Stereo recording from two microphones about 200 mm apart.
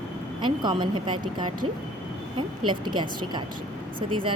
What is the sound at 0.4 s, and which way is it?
Speech, 25° right (ahead or behind).